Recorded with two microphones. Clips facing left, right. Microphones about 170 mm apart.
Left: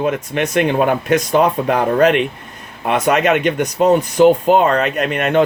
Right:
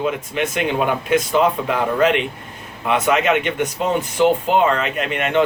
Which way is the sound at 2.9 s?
40° left (ahead or behind).